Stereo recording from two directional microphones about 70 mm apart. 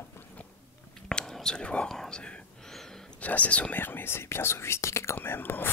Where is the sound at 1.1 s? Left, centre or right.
Centre.